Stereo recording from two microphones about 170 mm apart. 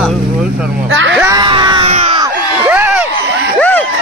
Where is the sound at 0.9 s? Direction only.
90° right.